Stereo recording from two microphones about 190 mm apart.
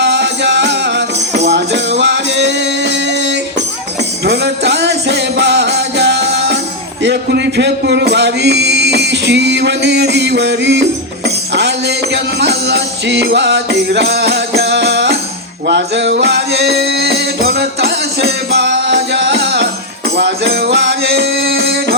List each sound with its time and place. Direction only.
0.0 s music: 65° right (ahead or behind)